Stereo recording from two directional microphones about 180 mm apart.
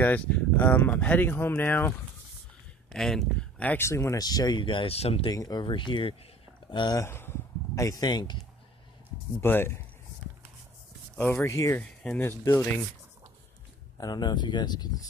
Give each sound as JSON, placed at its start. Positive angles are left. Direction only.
{"t": 0.0, "sound": "speech", "side_deg": 10}
{"t": 5.3, "sound": "speech", "side_deg": 20}
{"t": 9.4, "sound": "speech", "side_deg": 10}
{"t": 11.1, "sound": "speech", "side_deg": 10}
{"t": 12.0, "sound": "speech", "side_deg": 5}
{"t": 12.3, "sound": "speech", "side_deg": 15}
{"t": 13.9, "sound": "speech", "side_deg": 20}